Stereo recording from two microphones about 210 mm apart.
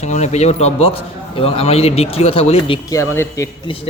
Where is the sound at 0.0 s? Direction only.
30° left (ahead or behind).